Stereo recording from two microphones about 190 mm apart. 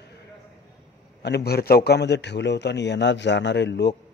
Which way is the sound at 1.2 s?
60° left (ahead or behind).